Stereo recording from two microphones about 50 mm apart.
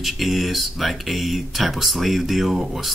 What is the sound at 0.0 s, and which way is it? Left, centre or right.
Speech, centre.